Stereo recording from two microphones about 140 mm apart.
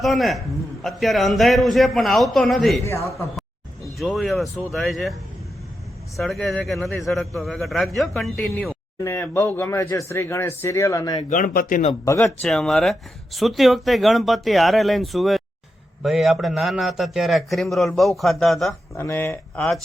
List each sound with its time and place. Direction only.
0.0 s speech: centre (ahead or behind)
2.8 s speech: 20° left (ahead or behind)
3.9 s speech: centre (ahead or behind)
6.1 s speech: centre (ahead or behind)
9.0 s speech: 15° left (ahead or behind)
11.3 s speech: 70° left (ahead or behind)
12.0 s speech: 20° left (ahead or behind)
12.4 s speech: 5° left (ahead or behind)
18.9 s speech: 15° left (ahead or behind)
19.5 s speech: centre (ahead or behind)